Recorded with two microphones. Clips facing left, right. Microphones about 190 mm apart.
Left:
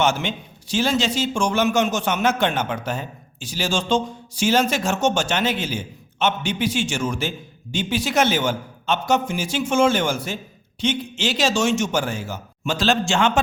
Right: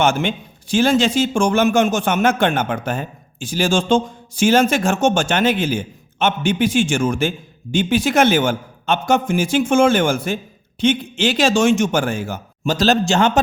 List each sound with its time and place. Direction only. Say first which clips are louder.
0.0 s a man's voice: right 4 dB; 55° right (ahead or behind)